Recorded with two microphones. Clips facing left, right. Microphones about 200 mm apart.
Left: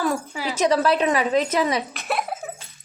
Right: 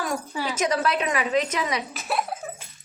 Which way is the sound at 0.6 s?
30° left (ahead or behind).